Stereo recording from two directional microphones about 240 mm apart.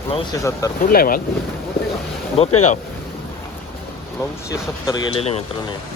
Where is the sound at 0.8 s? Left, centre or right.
Left.